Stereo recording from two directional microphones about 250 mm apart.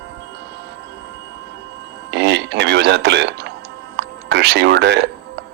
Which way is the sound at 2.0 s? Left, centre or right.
Right.